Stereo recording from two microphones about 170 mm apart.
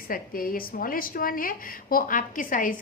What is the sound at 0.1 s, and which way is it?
A woman's voice, 55° left (ahead or behind).